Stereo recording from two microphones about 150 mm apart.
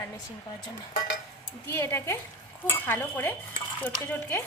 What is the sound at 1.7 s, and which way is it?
Stir, 15° left (ahead or behind).